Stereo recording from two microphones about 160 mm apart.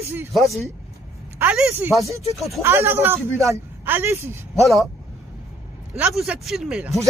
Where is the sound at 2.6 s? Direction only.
15° right (ahead or behind).